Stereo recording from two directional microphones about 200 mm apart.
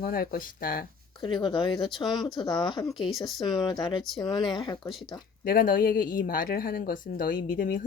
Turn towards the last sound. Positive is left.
turn(degrees=45)  # may be behind; listen again after turning